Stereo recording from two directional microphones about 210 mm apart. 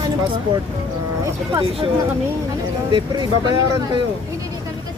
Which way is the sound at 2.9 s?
20° right (ahead or behind).